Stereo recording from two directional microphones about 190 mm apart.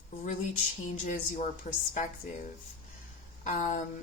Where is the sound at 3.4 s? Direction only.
40° left (ahead or behind).